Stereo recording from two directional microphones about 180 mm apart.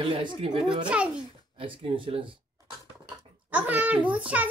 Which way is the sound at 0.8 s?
5° right (ahead or behind).